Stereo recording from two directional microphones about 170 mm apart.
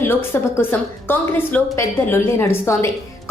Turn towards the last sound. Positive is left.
turn(degrees=15)  # may be behind; listen again after turning